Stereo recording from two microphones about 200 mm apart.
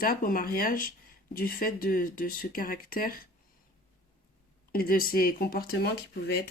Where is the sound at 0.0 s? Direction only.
45° left (ahead or behind).